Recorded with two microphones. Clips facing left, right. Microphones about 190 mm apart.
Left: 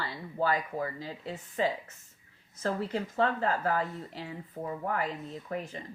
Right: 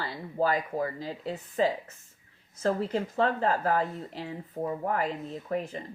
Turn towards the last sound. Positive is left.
turn(degrees=-35)  # may be behind; listen again after turning